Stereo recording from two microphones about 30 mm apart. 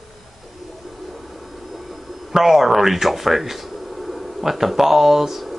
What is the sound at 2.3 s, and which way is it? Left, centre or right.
Speech, centre.